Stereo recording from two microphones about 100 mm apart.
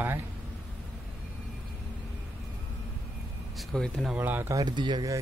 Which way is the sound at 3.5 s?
5° left (ahead or behind).